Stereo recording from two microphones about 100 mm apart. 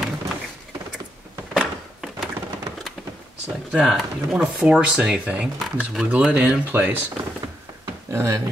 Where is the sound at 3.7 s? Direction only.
5° right (ahead or behind).